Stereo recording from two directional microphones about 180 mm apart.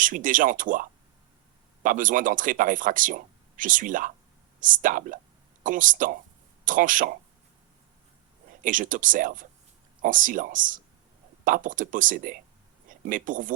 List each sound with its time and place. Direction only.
0.0 s speech: 50° right (ahead or behind)
8.6 s speech: 50° right (ahead or behind)